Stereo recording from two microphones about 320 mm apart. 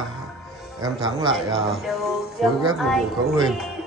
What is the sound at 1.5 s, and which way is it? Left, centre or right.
Speech, centre.